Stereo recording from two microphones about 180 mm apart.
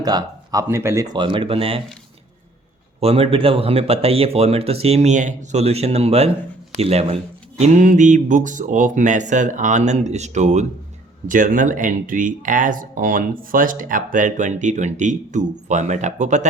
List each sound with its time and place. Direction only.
0.0 s speech: 20° right (ahead or behind)
3.0 s speech: 35° right (ahead or behind)
7.6 s speech: 45° right (ahead or behind)